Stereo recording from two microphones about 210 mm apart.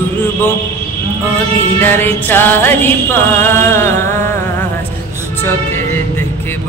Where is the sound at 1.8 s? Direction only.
10° left (ahead or behind).